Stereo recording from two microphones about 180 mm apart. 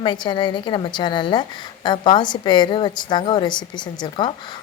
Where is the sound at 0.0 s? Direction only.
25° left (ahead or behind).